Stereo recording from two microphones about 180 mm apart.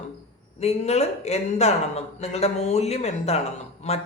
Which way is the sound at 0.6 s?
35° left (ahead or behind).